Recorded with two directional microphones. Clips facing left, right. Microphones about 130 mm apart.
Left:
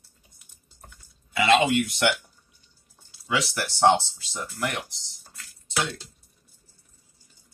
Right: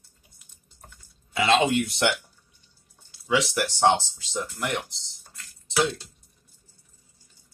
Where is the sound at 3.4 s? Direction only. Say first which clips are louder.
Right 1 dB; 20° right (ahead or behind).